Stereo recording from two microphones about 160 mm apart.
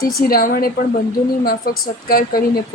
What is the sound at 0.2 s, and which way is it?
A woman's voice, 65° left (ahead or behind).